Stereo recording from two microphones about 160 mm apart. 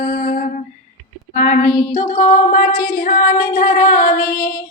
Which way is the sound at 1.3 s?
55° left (ahead or behind).